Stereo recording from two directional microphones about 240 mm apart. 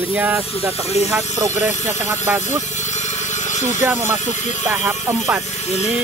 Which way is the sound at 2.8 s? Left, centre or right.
Left.